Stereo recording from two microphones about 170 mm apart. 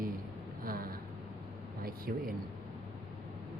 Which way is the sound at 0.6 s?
60° right (ahead or behind).